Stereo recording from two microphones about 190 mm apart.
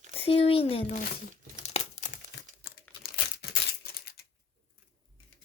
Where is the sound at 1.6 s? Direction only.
40° left (ahead or behind).